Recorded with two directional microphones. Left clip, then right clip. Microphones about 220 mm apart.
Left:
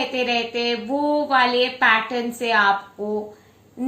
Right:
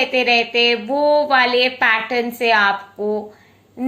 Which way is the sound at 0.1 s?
35° right (ahead or behind).